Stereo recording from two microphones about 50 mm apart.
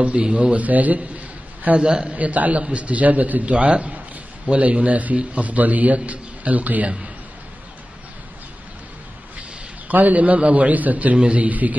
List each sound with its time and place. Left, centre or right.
0.0 s a man's voice: right
9.8 s a man's voice: right